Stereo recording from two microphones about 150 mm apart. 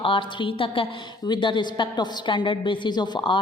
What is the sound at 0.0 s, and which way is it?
A woman's voice, 35° left (ahead or behind).